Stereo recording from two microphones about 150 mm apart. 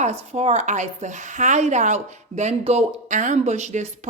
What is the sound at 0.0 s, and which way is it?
Speech, 45° right (ahead or behind).